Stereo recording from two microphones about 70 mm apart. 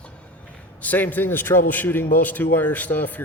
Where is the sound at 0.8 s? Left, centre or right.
Left.